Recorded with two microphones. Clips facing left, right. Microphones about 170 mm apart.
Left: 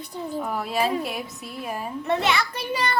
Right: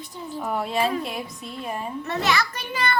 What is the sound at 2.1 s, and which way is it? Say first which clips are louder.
Speech: right 3 dB; 30° left (ahead or behind).